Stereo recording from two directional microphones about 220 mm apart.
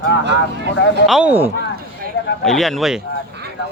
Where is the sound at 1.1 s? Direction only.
5° right (ahead or behind).